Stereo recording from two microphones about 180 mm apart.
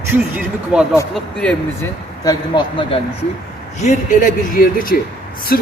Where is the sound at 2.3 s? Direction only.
25° left (ahead or behind).